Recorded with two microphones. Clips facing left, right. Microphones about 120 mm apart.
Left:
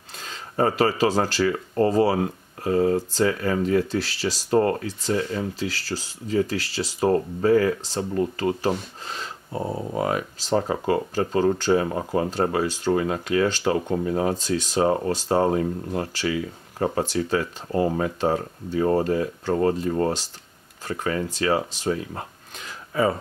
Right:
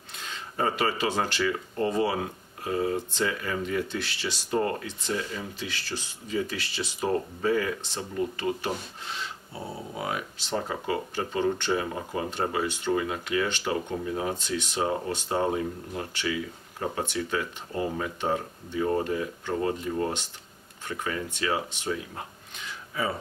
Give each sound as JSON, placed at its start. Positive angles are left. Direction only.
{"t": 0.3, "sound": "speech", "side_deg": 40}